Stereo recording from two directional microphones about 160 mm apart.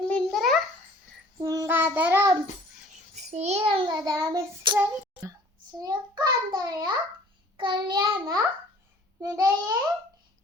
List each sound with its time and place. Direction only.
0.1 s a sound: centre (ahead or behind)
1.4 s child singing: 20° right (ahead or behind)
3.2 s a child's voice: 45° right (ahead or behind); by 9.7 s 20° right (ahead or behind)